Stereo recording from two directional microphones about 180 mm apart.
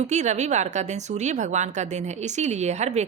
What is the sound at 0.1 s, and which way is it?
A woman's voice, 40° right (ahead or behind).